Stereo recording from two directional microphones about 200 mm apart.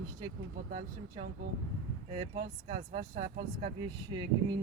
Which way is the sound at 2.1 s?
25° right (ahead or behind).